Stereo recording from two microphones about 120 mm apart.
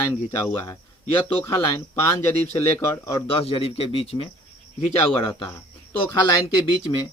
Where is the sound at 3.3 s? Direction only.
55° left (ahead or behind).